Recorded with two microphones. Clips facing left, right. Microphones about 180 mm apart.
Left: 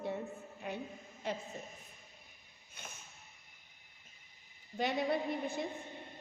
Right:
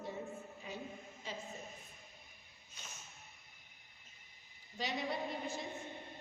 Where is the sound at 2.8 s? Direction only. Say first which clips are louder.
Left 4 dB; 55° left (ahead or behind).